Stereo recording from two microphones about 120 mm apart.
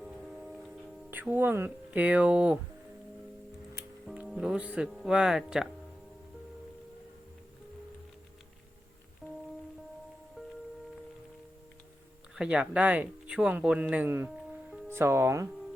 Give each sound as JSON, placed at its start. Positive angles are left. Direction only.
{"t": 0.0, "sound": "music", "side_deg": 0}
{"t": 1.1, "sound": "speech", "side_deg": -15}
{"t": 4.3, "sound": "speech", "side_deg": -5}
{"t": 9.2, "sound": "music", "side_deg": 0}
{"t": 12.3, "sound": "speech", "side_deg": -10}